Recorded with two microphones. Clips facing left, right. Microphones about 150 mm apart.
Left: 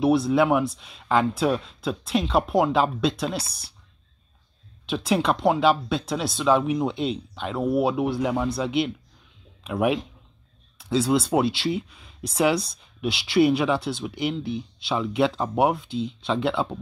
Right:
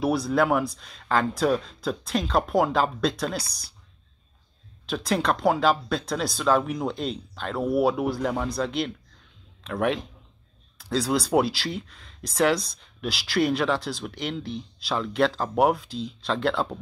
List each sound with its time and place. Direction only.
0.0 s speech: centre (ahead or behind)
4.8 s speech: 5° left (ahead or behind)